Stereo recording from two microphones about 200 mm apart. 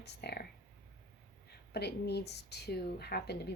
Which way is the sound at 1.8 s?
55° left (ahead or behind).